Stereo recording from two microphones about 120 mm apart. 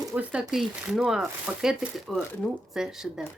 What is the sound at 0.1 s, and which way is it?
Speech, 10° right (ahead or behind).